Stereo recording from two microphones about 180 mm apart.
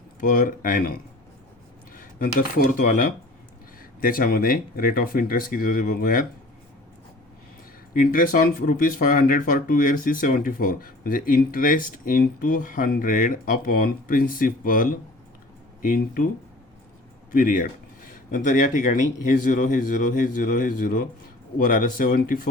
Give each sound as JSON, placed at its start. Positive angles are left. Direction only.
{"t": 0.2, "sound": "speech", "side_deg": 50}
{"t": 2.0, "sound": "speech", "side_deg": 50}
{"t": 7.9, "sound": "speech", "side_deg": 50}
{"t": 17.3, "sound": "speech", "side_deg": 50}